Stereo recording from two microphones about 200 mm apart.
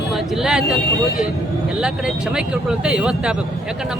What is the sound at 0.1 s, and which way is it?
Speech, 5° right (ahead or behind).